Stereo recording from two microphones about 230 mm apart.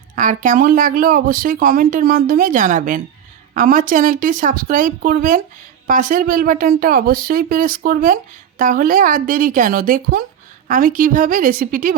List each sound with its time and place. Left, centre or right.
0.2 s speech: right